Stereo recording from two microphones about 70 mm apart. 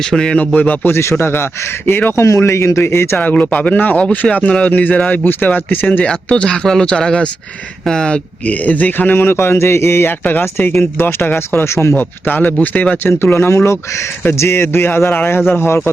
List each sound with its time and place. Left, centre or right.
0.1 s speech: centre
0.3 s a man's voice: left
1.1 s speech: left
2.2 s speech: left
3.2 s a man's voice: left
6.1 s a man's voice: centre; by 11.9 s left
11.9 s a man's voice: left
13.1 s speech: left